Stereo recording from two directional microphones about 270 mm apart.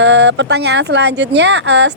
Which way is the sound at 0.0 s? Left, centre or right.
Right.